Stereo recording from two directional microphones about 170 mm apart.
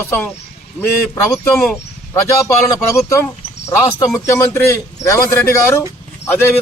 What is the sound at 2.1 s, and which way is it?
A man's voice, 15° left (ahead or behind).